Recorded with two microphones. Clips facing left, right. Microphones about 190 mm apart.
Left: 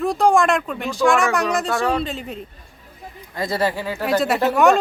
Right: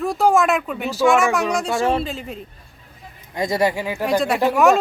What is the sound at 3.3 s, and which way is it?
Speech, 15° right (ahead or behind).